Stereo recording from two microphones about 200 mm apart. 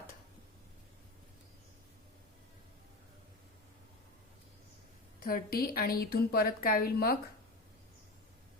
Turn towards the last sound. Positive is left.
turn(degrees=50)  # may be behind; listen again after turning